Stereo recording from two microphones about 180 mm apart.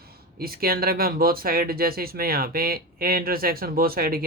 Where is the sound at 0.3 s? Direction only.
55° right (ahead or behind).